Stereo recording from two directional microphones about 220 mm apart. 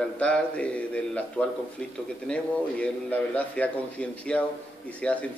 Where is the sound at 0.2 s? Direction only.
5° left (ahead or behind).